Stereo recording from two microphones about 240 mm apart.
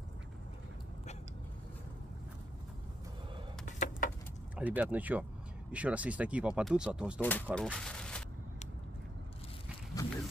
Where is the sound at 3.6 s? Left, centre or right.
Left.